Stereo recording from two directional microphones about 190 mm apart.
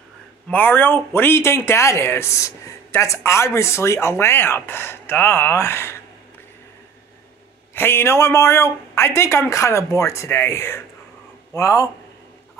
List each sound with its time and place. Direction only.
0.5 s speech: 10° left (ahead or behind)
7.7 s speech: 10° left (ahead or behind)